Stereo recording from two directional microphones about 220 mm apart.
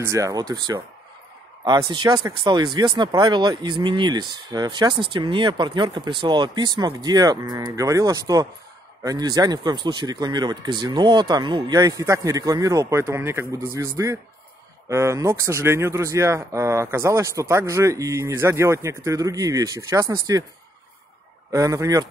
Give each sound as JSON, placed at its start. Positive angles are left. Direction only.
{"t": 0.0, "sound": "speech", "side_deg": -15}
{"t": 21.5, "sound": "speech", "side_deg": -15}